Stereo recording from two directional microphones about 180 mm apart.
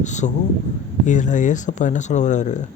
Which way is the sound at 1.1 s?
45° left (ahead or behind).